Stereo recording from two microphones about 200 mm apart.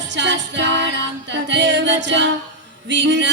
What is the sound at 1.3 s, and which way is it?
A capella, 60° right (ahead or behind).